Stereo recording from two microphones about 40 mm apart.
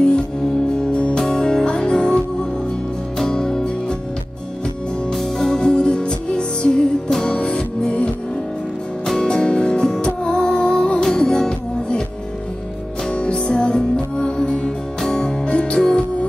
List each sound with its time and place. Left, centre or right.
1.1 s music: centre
5.1 s music: centre
5.6 s music: left
9.2 s music: centre
13.1 s music: left